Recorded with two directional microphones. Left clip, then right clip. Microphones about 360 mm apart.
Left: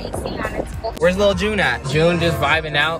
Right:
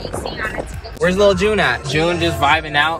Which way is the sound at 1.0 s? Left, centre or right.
Centre.